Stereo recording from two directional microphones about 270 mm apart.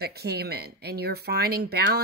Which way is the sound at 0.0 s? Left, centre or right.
Right.